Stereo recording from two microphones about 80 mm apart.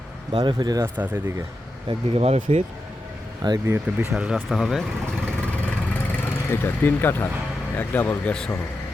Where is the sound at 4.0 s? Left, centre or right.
Centre.